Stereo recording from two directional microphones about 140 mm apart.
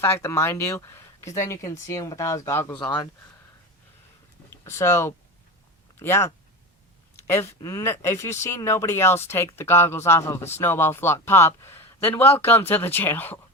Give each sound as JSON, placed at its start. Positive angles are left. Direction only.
{"t": 0.0, "sound": "speech", "side_deg": 20}
{"t": 2.7, "sound": "speech", "side_deg": 35}
{"t": 4.6, "sound": "speech", "side_deg": 20}